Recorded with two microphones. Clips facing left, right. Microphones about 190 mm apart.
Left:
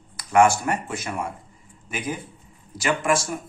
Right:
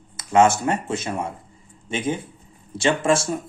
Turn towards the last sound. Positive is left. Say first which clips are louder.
# right 3 dB
turn(degrees=-25)  # may be behind; listen again after turning